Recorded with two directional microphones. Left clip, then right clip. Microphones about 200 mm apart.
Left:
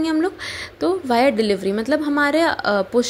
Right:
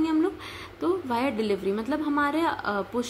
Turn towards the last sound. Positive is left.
turn(degrees=25)  # may be behind; listen again after turning